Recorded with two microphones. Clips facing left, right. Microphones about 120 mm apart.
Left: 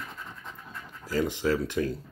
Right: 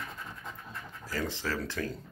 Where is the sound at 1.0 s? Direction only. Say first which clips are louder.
Left 8 dB; 15° left (ahead or behind).